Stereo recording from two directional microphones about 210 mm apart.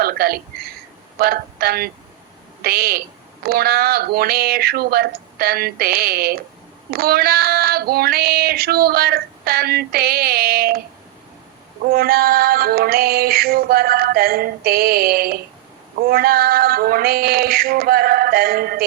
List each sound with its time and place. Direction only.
0.0 s speech: 45° right (ahead or behind)
1.2 s child singing: 45° right (ahead or behind)
2.6 s speech: 45° right (ahead or behind)
3.4 s child singing: 45° right (ahead or behind)
11.9 s child singing: 45° right (ahead or behind)